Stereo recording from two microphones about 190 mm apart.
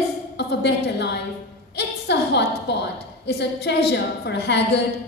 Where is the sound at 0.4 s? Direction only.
65° left (ahead or behind).